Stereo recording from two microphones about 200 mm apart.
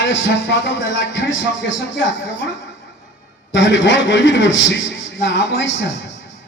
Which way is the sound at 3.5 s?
65° left (ahead or behind).